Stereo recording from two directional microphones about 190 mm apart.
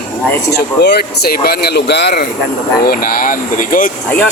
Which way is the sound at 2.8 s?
50° left (ahead or behind).